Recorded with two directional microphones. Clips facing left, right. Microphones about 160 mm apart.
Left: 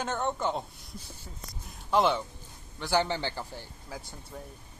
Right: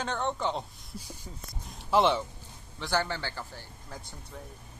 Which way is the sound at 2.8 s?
15° left (ahead or behind).